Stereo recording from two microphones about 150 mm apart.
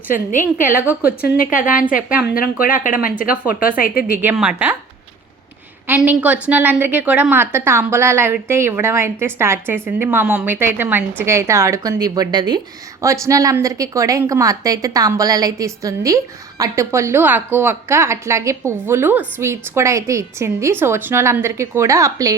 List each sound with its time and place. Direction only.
0.1 s a woman's voice: 60° left (ahead or behind)
1.2 s a woman's voice: 80° left
4.2 s a woman's voice: 10° right (ahead or behind)
5.9 s a woman's voice: 10° right (ahead or behind)